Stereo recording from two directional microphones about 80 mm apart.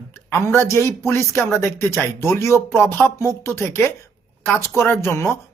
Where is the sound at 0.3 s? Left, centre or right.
Left.